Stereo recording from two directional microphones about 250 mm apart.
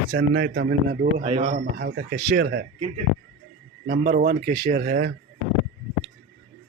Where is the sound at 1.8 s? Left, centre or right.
Right.